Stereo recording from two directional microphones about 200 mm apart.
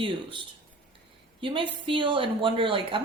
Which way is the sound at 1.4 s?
25° right (ahead or behind).